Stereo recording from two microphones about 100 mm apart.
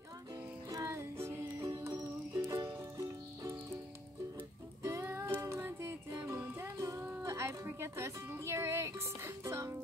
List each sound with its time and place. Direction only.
0.7 s music: 30° right (ahead or behind)
4.8 s music: 30° right (ahead or behind)